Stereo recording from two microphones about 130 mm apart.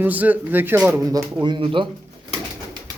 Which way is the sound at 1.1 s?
35° right (ahead or behind).